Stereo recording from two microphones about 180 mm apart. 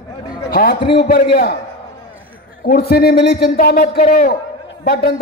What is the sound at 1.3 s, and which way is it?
Speech, 65° left (ahead or behind).